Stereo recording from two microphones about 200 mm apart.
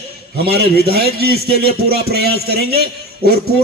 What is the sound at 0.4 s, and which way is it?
A man's voice, 55° right (ahead or behind).